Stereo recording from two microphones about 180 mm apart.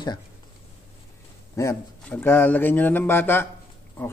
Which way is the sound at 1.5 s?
15° left (ahead or behind).